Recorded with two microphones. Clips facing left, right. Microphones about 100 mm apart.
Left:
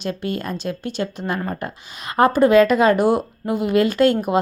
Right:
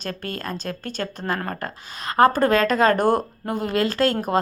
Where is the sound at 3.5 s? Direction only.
35° right (ahead or behind).